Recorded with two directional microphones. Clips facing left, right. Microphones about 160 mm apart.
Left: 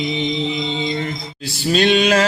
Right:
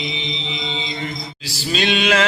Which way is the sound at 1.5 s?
50° left (ahead or behind).